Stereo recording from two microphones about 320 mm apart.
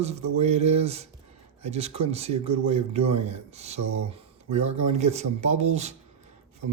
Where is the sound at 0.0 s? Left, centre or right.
Centre.